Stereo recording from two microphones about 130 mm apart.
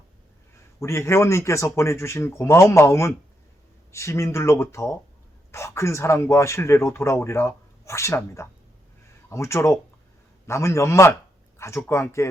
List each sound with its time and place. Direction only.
0.8 s a man's voice: 20° left (ahead or behind)